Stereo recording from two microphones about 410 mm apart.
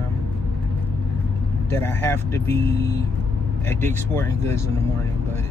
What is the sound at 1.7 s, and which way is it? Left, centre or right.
Speech, centre.